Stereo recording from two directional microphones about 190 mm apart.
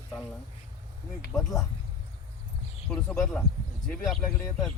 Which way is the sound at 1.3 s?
Centre (ahead or behind).